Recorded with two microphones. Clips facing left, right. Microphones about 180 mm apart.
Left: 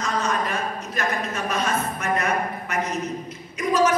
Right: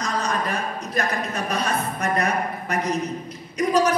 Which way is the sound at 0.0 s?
35° right (ahead or behind).